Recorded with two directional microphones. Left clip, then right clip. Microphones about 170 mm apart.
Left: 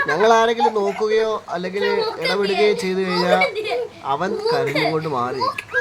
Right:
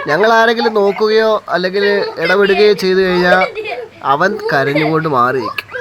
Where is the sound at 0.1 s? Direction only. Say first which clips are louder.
Right 7 dB; 25° right (ahead or behind).